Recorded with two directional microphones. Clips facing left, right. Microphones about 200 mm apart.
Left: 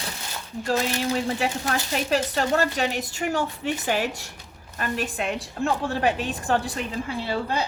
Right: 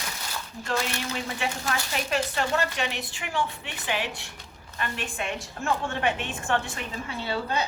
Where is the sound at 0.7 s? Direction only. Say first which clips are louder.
Left 6 dB; 35° left (ahead or behind).